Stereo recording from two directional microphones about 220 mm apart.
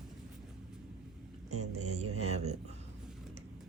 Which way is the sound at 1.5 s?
80° right.